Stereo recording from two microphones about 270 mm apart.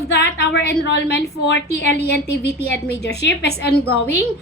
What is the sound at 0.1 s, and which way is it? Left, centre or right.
A woman's voice, left.